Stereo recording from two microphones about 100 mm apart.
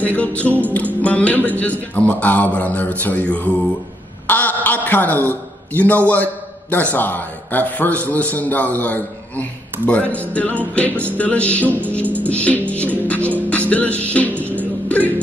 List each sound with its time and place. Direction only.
0.0 s a man's voice: 15° left (ahead or behind)
4.3 s a sound: 15° left (ahead or behind)
4.6 s a man's voice: 20° left (ahead or behind)
12.2 s music: 15° left (ahead or behind)
14.3 s music: 20° right (ahead or behind)
14.9 s music: 15° left (ahead or behind)